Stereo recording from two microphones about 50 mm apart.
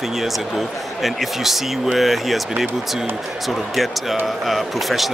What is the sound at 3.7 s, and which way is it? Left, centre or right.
Speech, centre.